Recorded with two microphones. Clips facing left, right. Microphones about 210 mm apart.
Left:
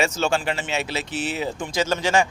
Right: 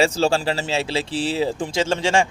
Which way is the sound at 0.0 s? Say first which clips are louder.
Right 4 dB; 30° right (ahead or behind).